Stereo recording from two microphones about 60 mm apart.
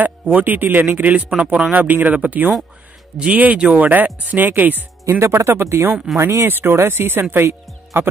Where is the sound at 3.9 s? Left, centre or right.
Right.